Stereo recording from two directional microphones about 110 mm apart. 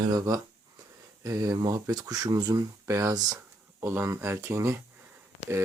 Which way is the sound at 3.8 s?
20° right (ahead or behind).